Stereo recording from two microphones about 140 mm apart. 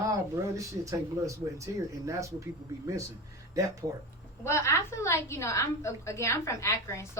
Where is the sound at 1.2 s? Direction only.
20° right (ahead or behind).